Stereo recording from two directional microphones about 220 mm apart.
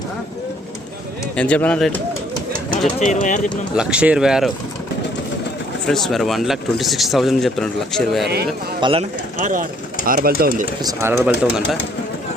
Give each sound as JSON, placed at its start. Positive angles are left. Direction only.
{"t": 1.4, "sound": "speech", "side_deg": 5}
{"t": 3.0, "sound": "speech", "side_deg": 35}
{"t": 3.8, "sound": "speech", "side_deg": -5}
{"t": 5.9, "sound": "speech", "side_deg": 0}
{"t": 8.8, "sound": "speech", "side_deg": -25}
{"t": 9.4, "sound": "speech", "side_deg": -35}
{"t": 10.8, "sound": "speech", "side_deg": -10}